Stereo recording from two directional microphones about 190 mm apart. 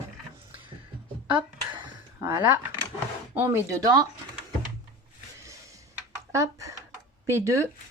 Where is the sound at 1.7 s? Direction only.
20° right (ahead or behind).